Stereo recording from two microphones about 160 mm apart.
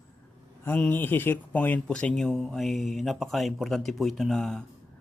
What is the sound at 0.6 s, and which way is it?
Speech, 10° left (ahead or behind).